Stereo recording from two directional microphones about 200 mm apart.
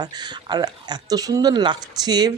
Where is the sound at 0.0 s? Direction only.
20° right (ahead or behind).